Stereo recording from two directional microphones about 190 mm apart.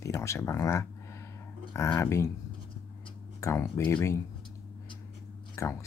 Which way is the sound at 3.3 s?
15° left (ahead or behind).